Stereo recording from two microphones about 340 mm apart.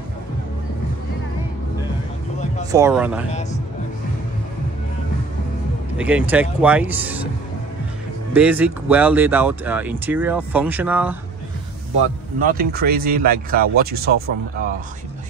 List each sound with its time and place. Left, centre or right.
2.7 s speech: centre
3.3 s a man's voice: centre
5.9 s speech: centre
8.3 s speech: centre
12.4 s speech: right